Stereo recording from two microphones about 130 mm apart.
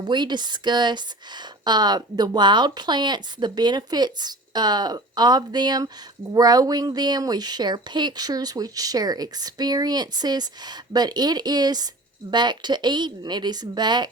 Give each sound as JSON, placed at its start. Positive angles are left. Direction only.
{"t": 0.0, "sound": "speech", "side_deg": -35}